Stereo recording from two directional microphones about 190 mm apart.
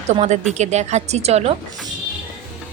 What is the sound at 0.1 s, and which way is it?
A woman's voice, 35° right (ahead or behind).